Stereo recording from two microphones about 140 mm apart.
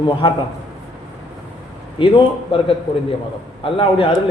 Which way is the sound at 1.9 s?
40° left (ahead or behind).